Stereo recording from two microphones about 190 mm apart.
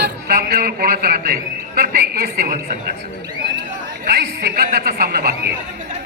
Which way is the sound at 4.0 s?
55° right (ahead or behind).